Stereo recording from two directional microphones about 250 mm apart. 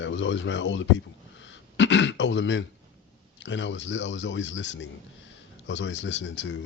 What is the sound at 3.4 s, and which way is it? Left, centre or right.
A man's voice, left.